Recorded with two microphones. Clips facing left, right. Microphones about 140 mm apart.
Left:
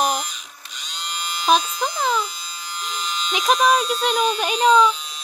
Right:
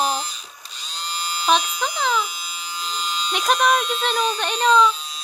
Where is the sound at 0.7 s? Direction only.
35° right (ahead or behind).